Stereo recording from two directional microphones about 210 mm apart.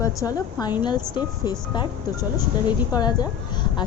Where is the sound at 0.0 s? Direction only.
15° left (ahead or behind).